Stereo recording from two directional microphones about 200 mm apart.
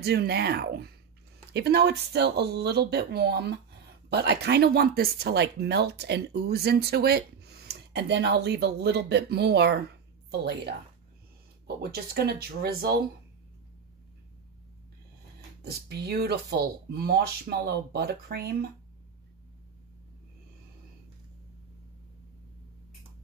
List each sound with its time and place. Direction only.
0.0 s speech: 55° right (ahead or behind)
15.6 s speech: 55° right (ahead or behind)